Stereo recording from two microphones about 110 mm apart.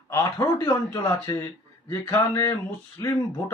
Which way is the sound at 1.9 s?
30° left (ahead or behind).